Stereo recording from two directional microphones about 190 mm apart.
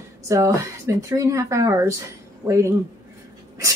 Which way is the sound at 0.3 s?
15° right (ahead or behind).